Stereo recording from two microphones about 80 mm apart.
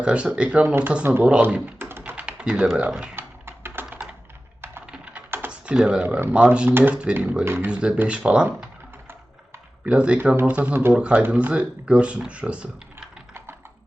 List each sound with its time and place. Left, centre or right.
0.0 s speech: centre
1.2 s speech: centre
1.8 s typing: right; by 3.1 s centre
3.2 s typing: right
5.5 s speech: centre
6.7 s speech: right
7.4 s speech: right
7.7 s speech: centre
9.8 s speech: centre
10.9 s speech: centre